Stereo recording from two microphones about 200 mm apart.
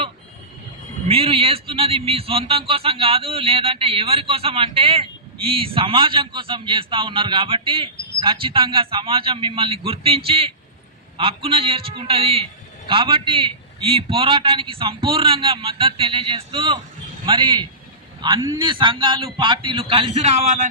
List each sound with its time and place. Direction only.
1.0 s a man's voice: 30° right (ahead or behind)